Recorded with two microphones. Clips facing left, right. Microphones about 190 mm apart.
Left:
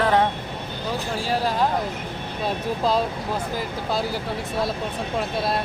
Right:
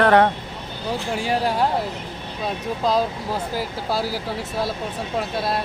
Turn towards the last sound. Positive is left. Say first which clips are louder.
# even
turn(degrees=0)  # may be behind; listen again after turning